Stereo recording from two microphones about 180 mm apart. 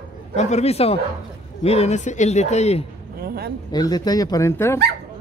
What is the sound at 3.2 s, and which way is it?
Speech, 60° right (ahead or behind).